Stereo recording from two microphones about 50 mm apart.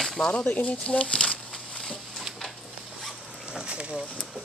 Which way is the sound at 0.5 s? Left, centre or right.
Left.